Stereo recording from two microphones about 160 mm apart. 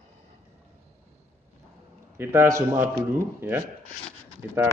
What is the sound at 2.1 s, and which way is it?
A man's voice, 15° right (ahead or behind).